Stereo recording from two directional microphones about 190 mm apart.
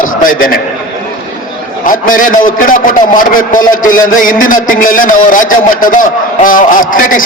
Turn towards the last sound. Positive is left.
turn(degrees=45)  # may be behind; listen again after turning